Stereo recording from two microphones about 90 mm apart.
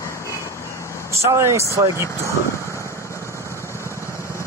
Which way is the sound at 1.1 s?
35° right (ahead or behind).